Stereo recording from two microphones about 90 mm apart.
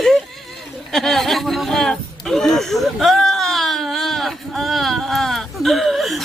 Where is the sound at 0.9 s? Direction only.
5° left (ahead or behind).